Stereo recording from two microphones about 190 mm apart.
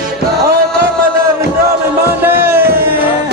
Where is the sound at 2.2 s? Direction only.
10° right (ahead or behind).